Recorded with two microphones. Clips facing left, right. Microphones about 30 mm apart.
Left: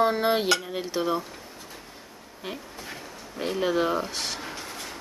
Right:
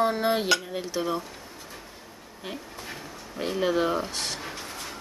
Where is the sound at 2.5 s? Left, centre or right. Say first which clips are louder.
Left 1 dB; centre.